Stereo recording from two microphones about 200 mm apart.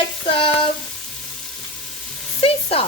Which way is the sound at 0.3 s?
25° left (ahead or behind).